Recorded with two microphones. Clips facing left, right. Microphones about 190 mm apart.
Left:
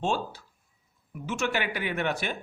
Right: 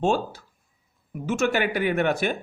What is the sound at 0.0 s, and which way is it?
Speech, 45° right (ahead or behind).